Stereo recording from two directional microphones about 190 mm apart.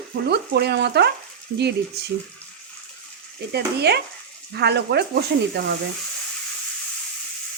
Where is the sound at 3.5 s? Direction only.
60° right (ahead or behind).